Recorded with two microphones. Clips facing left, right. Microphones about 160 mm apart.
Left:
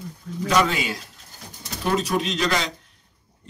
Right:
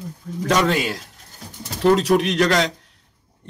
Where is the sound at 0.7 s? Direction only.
80° right.